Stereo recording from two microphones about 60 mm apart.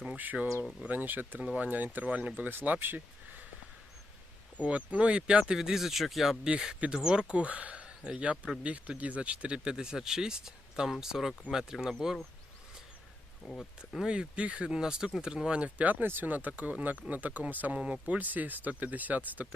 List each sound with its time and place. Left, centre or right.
0.2 s speech: right
4.6 s speech: right
13.4 s speech: centre
14.0 s speech: centre
17.7 s speech: centre